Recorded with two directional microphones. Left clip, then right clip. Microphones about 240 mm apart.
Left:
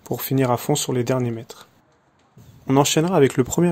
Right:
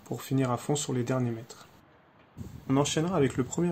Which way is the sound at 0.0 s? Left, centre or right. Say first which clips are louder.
Left 9 dB; left.